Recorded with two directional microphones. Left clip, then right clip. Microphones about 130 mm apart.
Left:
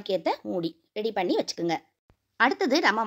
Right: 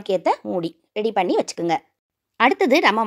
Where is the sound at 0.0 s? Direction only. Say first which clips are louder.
Right 7 dB; 35° right (ahead or behind).